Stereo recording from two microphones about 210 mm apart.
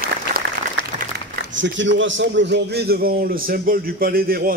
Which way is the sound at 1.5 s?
60° right (ahead or behind).